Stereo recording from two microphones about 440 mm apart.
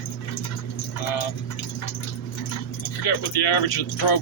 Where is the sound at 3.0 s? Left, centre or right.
Left.